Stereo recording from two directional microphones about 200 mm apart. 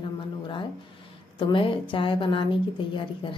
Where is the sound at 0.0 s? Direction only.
25° left (ahead or behind).